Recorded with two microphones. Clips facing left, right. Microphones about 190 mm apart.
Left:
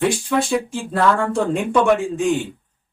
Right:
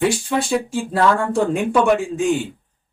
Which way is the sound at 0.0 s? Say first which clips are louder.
Even; centre (ahead or behind).